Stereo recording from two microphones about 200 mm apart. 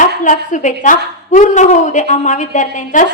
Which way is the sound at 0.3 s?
40° left (ahead or behind).